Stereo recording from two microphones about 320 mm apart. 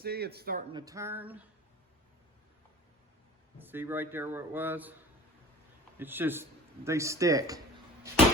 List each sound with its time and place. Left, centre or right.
0.0 s speech: right
0.7 s a man's voice: centre
3.6 s a man's voice: centre
6.0 s a man's voice: centre